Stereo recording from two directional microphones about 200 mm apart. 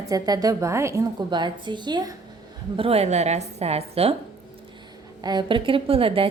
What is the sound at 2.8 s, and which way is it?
A woman's voice, 30° right (ahead or behind).